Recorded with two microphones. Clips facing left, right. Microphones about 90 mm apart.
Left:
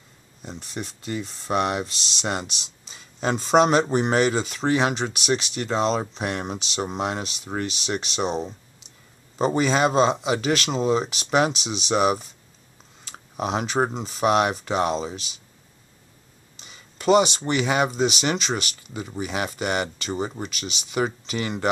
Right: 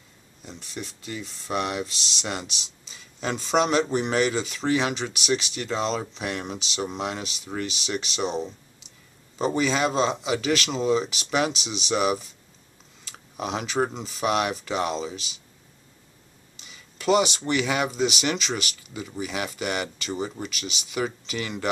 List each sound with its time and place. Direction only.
0.4 s speech: 40° left (ahead or behind)
16.5 s speech: 40° left (ahead or behind)